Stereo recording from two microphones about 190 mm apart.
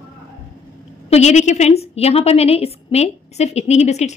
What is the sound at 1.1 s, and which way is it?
A woman's voice, 40° left (ahead or behind).